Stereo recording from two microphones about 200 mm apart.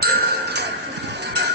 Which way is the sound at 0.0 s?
50° right (ahead or behind).